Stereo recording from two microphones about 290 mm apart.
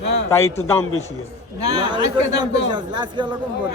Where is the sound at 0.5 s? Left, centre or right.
Centre.